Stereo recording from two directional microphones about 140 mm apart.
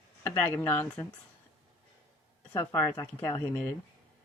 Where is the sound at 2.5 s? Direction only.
25° left (ahead or behind).